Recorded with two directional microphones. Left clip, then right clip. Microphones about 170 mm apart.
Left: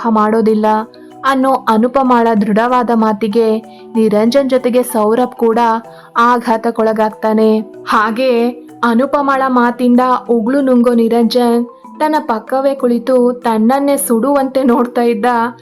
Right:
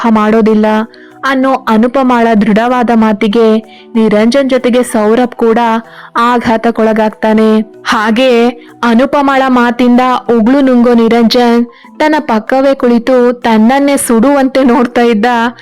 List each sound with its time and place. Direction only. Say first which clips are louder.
0.0 s speech: right 3 dB; 30° right (ahead or behind)